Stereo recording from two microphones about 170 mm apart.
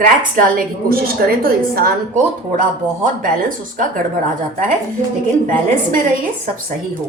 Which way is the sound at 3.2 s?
50° right (ahead or behind).